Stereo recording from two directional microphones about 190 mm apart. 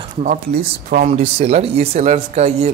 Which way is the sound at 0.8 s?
50° right (ahead or behind).